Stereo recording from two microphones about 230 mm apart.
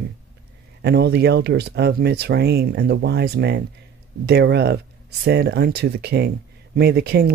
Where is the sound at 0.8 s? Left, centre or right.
Right.